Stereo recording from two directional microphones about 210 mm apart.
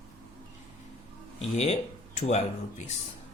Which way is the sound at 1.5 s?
30° left (ahead or behind).